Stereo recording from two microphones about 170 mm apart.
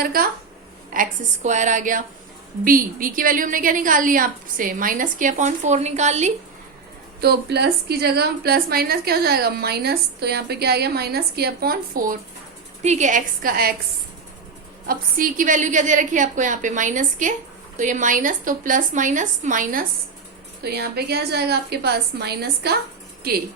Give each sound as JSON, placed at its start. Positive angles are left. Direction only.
{"t": 0.0, "sound": "speech", "side_deg": -60}
{"t": 0.9, "sound": "a woman's voice", "side_deg": -45}
{"t": 7.2, "sound": "a woman's voice", "side_deg": -75}
{"t": 12.8, "sound": "a woman's voice", "side_deg": -45}
{"t": 14.8, "sound": "a woman's voice", "side_deg": -55}
{"t": 20.7, "sound": "a woman's voice", "side_deg": -70}